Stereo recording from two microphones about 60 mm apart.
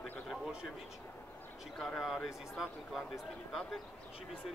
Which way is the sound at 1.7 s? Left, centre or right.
Centre.